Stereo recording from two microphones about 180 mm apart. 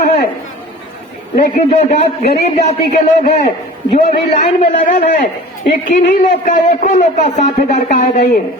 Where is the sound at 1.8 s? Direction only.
35° left (ahead or behind).